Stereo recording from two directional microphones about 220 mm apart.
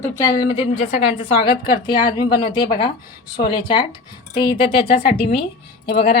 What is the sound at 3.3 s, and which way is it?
Speech, 20° left (ahead or behind).